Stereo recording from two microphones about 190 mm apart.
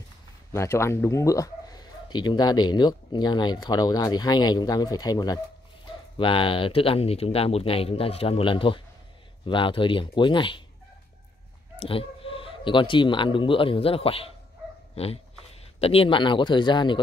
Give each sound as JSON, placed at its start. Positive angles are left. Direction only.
{"t": 0.5, "sound": "a man's voice", "side_deg": 15}
{"t": 11.8, "sound": "a man's voice", "side_deg": 30}